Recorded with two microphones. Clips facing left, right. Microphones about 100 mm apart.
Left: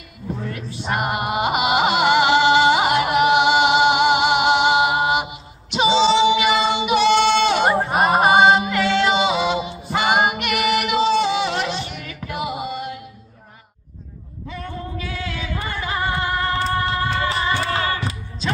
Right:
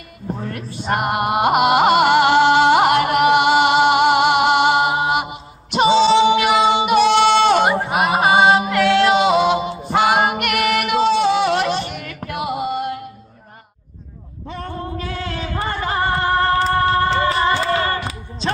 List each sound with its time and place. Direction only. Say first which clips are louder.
0.5 s music: right 4 dB; 50° right (ahead or behind)
4.8 s mantra: even; centre (ahead or behind)
5.3 s music: right 5 dB; 50° right (ahead or behind)
6.4 s female singing: right 3 dB; centre (ahead or behind)
6.8 s a sound: right 2 dB; 50° right (ahead or behind)
7.6 s a sound: even; centre (ahead or behind)
9.1 s music: right 4 dB; 50° right (ahead or behind)
9.9 s music: right 3 dB; 5° left (ahead or behind)
10.3 s female singing: right 2 dB; 55° right (ahead or behind)
12.6 s music: right 5 dB; 55° right (ahead or behind)
14.5 s music: right 3 dB; 40° right (ahead or behind)